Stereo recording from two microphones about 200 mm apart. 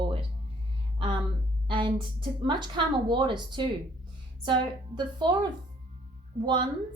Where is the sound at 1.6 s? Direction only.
25° right (ahead or behind).